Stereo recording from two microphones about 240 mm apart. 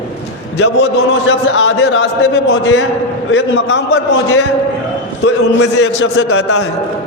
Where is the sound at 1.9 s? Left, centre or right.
Left.